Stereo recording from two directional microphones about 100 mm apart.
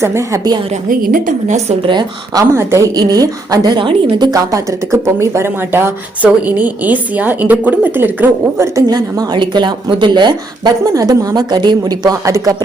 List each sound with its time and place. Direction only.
0.0 s speech: 30° right (ahead or behind)
1.9 s a woman's voice: 40° right (ahead or behind)
2.6 s speech: 30° right (ahead or behind)
8.9 s speech: 45° right (ahead or behind)